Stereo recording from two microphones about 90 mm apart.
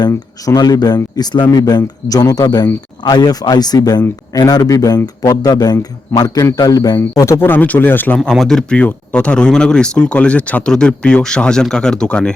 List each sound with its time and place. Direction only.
0.1 s a man's voice: 45° left (ahead or behind)
7.3 s speech: 25° left (ahead or behind)
8.2 s speech: 5° left (ahead or behind)